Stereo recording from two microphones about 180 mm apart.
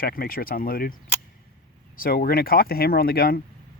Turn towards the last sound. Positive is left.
turn(degrees=55)  # may be behind; listen again after turning